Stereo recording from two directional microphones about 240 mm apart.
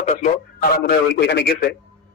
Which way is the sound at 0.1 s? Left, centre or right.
Left.